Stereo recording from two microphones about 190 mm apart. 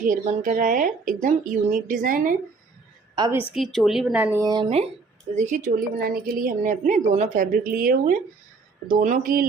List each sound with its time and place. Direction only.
0.0 s a woman's voice: 45° right (ahead or behind)
3.5 s speech: centre (ahead or behind)
4.4 s speech: 25° right (ahead or behind)
5.4 s a woman's voice: 45° right (ahead or behind)